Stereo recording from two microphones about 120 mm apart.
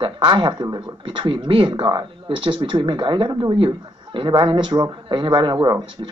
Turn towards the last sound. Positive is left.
turn(degrees=-40)  # may be behind; listen again after turning